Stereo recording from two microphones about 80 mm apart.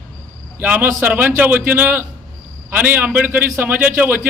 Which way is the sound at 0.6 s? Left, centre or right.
Centre.